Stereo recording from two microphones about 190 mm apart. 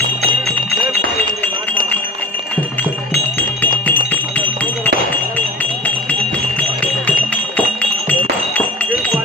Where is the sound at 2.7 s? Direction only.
10° left (ahead or behind).